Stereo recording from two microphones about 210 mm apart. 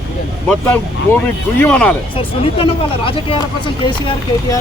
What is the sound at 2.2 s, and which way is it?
Speech, 25° left (ahead or behind).